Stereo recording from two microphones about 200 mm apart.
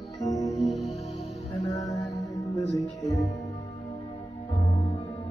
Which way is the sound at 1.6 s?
15° left (ahead or behind).